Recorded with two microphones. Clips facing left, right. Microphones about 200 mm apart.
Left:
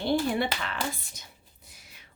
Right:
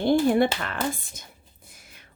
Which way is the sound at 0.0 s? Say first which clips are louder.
Right 7 dB; 50° right (ahead or behind).